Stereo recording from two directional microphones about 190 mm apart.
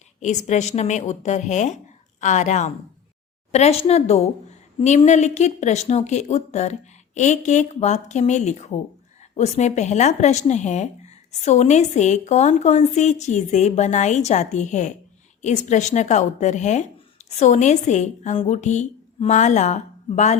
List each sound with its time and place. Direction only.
0.2 s speech: 40° left (ahead or behind)